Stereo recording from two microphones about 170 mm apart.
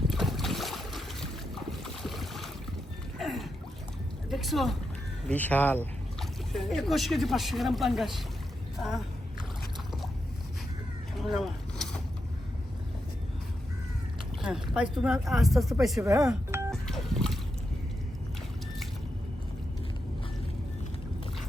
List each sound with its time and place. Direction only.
0.1 s boat: centre (ahead or behind)
3.2 s a sound: centre (ahead or behind)
4.3 s speech: centre (ahead or behind)
11.2 s vehicle: centre (ahead or behind)
14.4 s speech: centre (ahead or behind)
16.0 s speech: 20° right (ahead or behind)
16.8 s telephone dialing: centre (ahead or behind)